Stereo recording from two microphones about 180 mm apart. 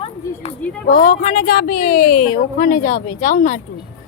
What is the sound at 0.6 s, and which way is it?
Speech, 5° left (ahead or behind).